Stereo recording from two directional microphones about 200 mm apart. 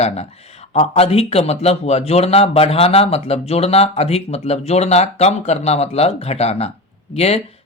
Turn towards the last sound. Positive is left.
turn(degrees=30)  # may be behind; listen again after turning